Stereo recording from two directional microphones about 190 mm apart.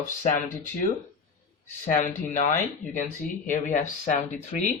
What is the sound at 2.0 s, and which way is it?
Speech, 40° left (ahead or behind).